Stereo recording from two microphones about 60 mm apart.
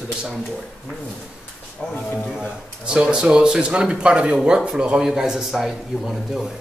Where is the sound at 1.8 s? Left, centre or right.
Centre.